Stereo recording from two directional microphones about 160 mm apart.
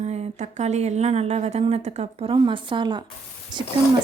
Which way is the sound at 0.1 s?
45° right (ahead or behind).